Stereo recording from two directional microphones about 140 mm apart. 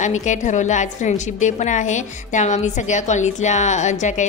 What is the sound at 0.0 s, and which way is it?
A woman's voice, 60° left (ahead or behind).